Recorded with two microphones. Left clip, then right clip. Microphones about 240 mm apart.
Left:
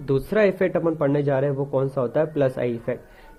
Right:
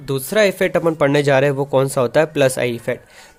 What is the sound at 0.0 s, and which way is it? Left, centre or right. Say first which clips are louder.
Speech: right 4 dB; right.